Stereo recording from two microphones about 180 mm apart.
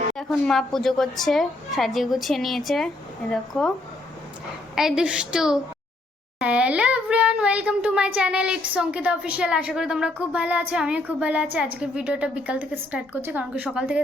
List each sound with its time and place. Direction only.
0.2 s a woman's voice: centre (ahead or behind)
4.7 s a woman's voice: centre (ahead or behind)